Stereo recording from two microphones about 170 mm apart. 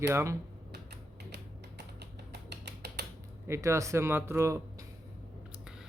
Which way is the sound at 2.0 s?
75° right (ahead or behind).